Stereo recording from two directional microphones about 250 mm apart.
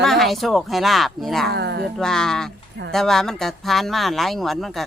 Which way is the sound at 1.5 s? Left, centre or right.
Right.